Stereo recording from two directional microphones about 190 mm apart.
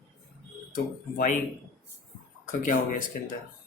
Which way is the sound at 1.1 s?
40° left (ahead or behind).